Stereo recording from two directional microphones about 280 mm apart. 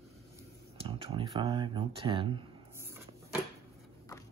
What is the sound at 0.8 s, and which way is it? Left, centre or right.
Speech, centre.